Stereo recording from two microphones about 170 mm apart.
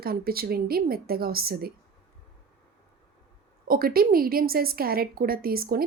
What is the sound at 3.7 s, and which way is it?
A woman's voice, 60° right (ahead or behind).